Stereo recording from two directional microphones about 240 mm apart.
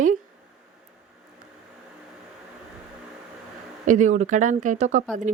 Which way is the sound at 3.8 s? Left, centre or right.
Right.